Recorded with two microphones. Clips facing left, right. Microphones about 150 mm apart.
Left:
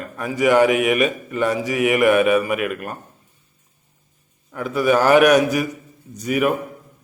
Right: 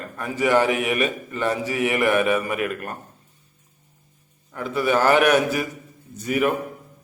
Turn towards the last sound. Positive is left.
turn(degrees=15)  # may be behind; listen again after turning